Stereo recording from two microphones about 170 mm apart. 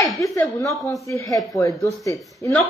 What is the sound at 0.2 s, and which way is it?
Speech, 20° left (ahead or behind).